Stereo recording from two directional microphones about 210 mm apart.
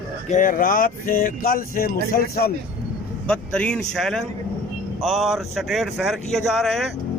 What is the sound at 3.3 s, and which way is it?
Speech, 5° left (ahead or behind).